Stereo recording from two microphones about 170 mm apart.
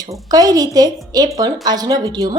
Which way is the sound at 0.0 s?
20° right (ahead or behind).